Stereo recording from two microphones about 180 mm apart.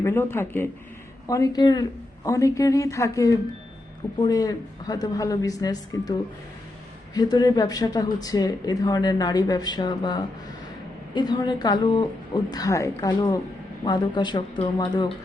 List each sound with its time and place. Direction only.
0.0 s a woman's voice: 15° left (ahead or behind)
7.1 s a woman's voice: 20° left (ahead or behind)